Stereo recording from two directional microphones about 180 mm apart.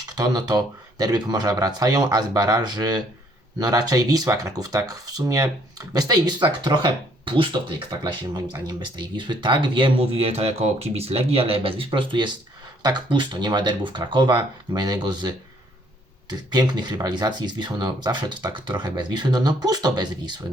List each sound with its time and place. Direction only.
0.0 s speech: 20° right (ahead or behind)